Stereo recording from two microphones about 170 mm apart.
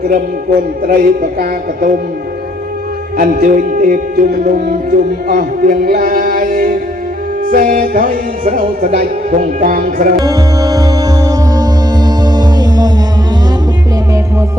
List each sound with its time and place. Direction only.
0.9 s speech: 55° right (ahead or behind)
3.2 s speech: 55° right (ahead or behind)
7.4 s music: 55° right (ahead or behind)
10.2 s music: 20° right (ahead or behind)